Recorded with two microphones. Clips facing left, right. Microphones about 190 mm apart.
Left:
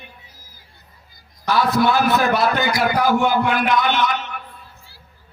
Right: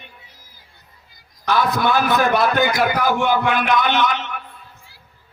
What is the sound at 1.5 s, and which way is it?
A man's voice, 50° right (ahead or behind).